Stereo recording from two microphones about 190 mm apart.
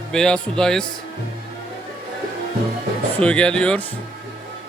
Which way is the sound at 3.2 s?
5° left (ahead or behind).